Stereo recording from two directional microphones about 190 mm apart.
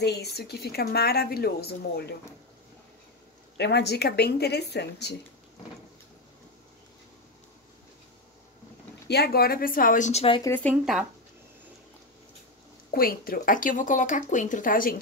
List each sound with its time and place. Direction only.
0.0 s a woman's voice: 60° left (ahead or behind)
3.5 s a woman's voice: 60° left (ahead or behind)
9.0 s speech: 60° left (ahead or behind); by 10.4 s 30° left (ahead or behind)
10.4 s speech: 10° left (ahead or behind)
12.9 s speech: 50° left (ahead or behind)